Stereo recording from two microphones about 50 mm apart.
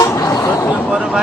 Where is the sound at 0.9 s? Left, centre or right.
Centre.